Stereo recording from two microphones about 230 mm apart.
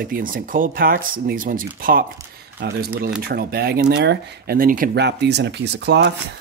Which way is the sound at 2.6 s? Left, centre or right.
Right.